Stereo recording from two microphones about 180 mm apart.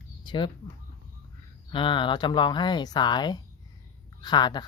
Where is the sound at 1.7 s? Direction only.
25° left (ahead or behind).